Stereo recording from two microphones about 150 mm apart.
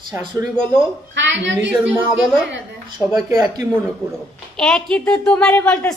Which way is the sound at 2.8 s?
25° right (ahead or behind).